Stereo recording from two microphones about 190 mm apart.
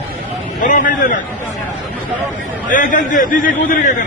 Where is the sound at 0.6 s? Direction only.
45° left (ahead or behind).